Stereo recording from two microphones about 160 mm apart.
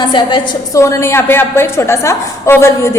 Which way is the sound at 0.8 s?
20° left (ahead or behind).